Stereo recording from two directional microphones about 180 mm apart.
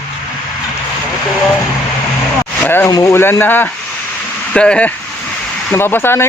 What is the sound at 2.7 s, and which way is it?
Speech, 15° left (ahead or behind).